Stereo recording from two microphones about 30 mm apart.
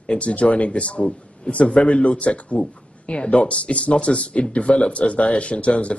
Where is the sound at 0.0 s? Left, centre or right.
Left.